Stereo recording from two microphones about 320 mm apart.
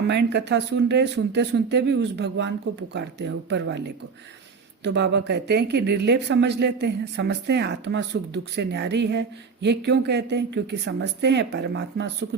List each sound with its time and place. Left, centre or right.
0.1 s speech: right